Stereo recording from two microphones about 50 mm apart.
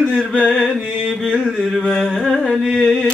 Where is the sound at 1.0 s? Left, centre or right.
Centre.